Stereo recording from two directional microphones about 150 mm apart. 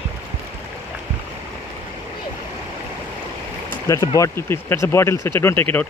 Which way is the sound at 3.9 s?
20° left (ahead or behind).